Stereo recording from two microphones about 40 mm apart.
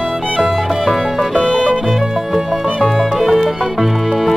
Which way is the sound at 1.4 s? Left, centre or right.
Left.